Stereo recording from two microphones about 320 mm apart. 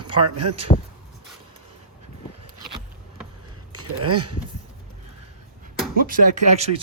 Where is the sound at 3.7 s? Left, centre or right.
Right.